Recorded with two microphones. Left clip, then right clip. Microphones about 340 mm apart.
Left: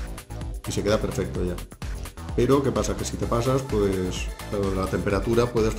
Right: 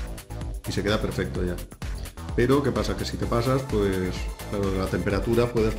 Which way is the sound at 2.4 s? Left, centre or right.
Centre.